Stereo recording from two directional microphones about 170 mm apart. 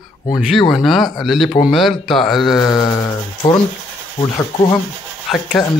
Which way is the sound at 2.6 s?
25° left (ahead or behind).